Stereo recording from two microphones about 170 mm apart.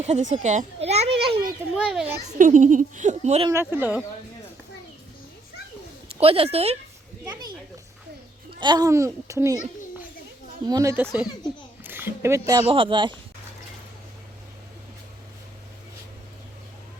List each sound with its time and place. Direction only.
0.0 s a child's voice: 40° right (ahead or behind)
1.7 s a child's voice: 5° right (ahead or behind)
2.2 s a child's voice: 45° right (ahead or behind)
3.5 s speech: 15° right (ahead or behind)
6.1 s a woman's voice: 35° right (ahead or behind)
7.3 s a child's voice: 25° right (ahead or behind)
8.6 s speech: 25° right (ahead or behind)
10.7 s speech: 20° right (ahead or behind)